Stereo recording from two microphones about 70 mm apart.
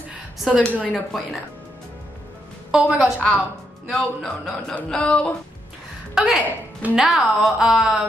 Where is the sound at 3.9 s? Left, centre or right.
Centre.